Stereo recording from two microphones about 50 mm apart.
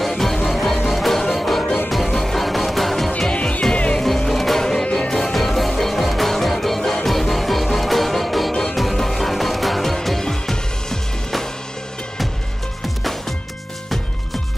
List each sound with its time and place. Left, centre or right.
0.0 s music: centre
3.1 s music: centre
4.3 s music: centre